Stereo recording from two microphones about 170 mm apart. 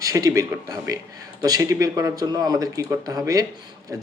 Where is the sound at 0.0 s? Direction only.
20° right (ahead or behind).